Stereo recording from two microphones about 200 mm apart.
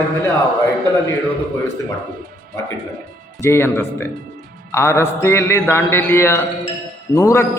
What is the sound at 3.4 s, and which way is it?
A man's voice, 10° left (ahead or behind).